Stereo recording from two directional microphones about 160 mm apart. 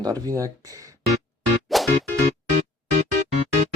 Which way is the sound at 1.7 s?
Centre (ahead or behind).